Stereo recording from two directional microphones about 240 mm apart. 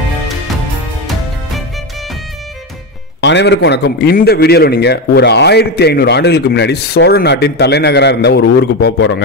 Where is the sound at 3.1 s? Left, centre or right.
Left.